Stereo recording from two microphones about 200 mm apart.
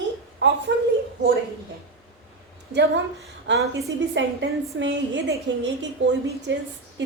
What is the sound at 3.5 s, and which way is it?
A woman's voice, 65° right (ahead or behind).